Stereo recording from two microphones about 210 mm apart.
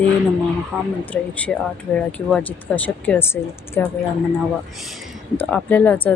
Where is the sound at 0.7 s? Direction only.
Centre (ahead or behind).